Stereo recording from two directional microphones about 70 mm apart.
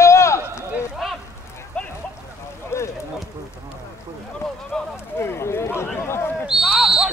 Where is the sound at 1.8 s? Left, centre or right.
Centre.